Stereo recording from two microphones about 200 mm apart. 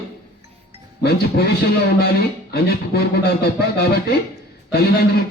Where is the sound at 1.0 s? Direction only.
55° left (ahead or behind).